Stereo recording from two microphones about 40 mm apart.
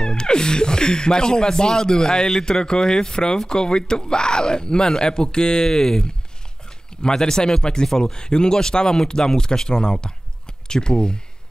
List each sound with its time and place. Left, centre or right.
0.0 s speech: centre
7.2 s speech: centre